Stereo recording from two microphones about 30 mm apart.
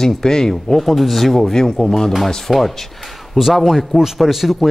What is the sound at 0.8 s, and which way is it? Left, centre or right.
Speech, centre.